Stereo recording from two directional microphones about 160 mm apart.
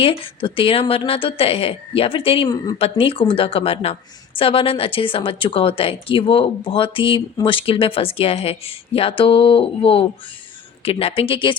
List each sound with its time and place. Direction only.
0.0 s speech: 35° left (ahead or behind)